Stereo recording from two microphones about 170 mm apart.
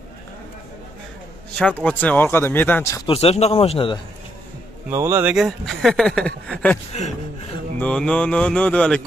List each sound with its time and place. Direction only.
1.5 s a man's voice: 5° left (ahead or behind)
3.1 s speech: 35° left (ahead or behind)
4.8 s a man's voice: 15° right (ahead or behind)
5.3 s speech: centre (ahead or behind)
6.9 s speech: 45° left (ahead or behind)
7.8 s speech: 5° left (ahead or behind)